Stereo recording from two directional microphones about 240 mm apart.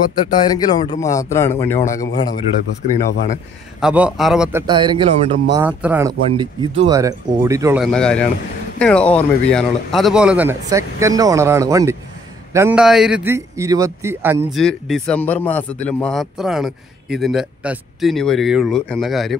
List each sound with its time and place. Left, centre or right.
0.3 s speech: centre
1.6 s speech: left
1.9 s speech: centre
2.9 s speech: left
3.8 s speech: centre; by 5.6 s right
5.6 s speech: centre
7.8 s a man's voice: centre
14.6 s a man's voice: centre